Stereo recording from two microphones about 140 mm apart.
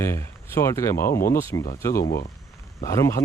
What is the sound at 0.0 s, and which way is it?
Speech, 20° left (ahead or behind).